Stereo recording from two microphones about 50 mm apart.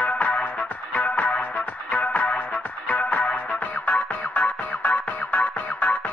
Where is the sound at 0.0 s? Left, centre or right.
Left.